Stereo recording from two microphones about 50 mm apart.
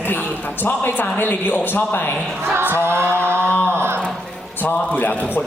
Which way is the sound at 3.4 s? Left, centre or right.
Left.